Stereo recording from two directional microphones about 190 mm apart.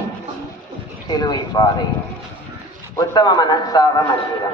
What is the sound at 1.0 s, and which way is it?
Speech, 20° left (ahead or behind).